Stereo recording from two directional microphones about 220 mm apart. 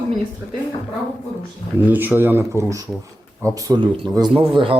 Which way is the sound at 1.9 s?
10° right (ahead or behind).